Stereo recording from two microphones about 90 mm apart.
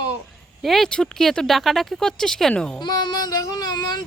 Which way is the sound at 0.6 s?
Centre (ahead or behind).